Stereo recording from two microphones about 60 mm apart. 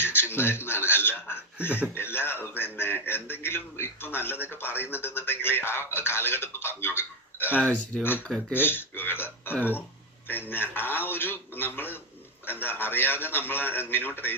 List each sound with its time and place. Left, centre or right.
0.0 s a man's voice: left
7.9 s speech: centre
8.5 s a man's voice: left